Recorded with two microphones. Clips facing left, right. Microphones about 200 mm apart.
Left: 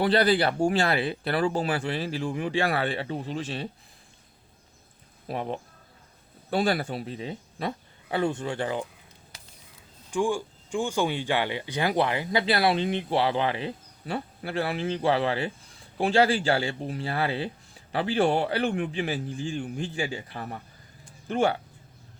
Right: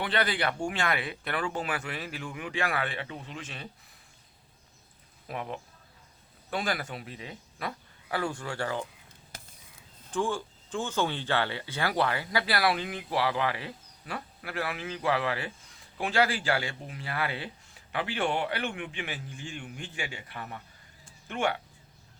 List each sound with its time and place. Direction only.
0.0 s speech: 35° left (ahead or behind)
5.3 s speech: 30° left (ahead or behind)
10.1 s speech: 10° left (ahead or behind); by 21.6 s 35° left (ahead or behind)